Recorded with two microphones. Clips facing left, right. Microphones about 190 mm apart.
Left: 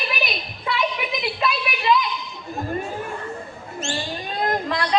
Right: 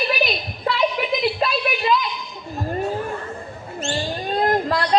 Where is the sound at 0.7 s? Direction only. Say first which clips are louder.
Right 2 dB; 45° right (ahead or behind).